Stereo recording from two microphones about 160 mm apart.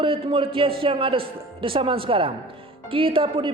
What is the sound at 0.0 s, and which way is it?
Speech, 30° right (ahead or behind).